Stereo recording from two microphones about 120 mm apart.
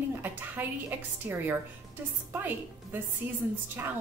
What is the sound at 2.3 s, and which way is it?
A woman's voice, 15° right (ahead or behind).